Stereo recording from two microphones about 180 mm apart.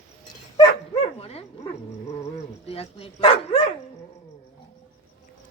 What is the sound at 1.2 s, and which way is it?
Speech, 35° left (ahead or behind).